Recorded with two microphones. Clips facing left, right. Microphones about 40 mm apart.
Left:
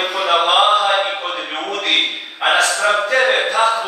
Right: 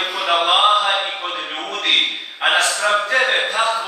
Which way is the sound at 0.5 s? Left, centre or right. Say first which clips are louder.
Even; left.